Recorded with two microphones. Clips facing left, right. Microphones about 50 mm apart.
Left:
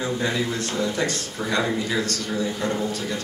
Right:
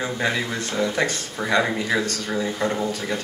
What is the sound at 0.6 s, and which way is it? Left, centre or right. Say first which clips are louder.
Speech: right 2 dB; right.